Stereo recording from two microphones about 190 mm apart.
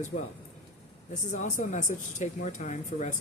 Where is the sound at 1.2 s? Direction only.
40° left (ahead or behind).